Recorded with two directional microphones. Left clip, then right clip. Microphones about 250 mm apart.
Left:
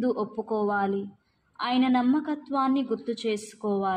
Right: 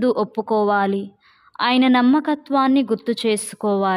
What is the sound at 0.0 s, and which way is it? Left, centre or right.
A woman's voice, right.